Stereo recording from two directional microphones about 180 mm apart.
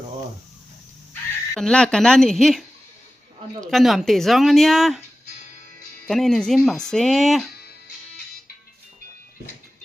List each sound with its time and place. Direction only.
1.1 s speech: 5° left (ahead or behind)
3.7 s speech: centre (ahead or behind)
6.1 s speech: centre (ahead or behind)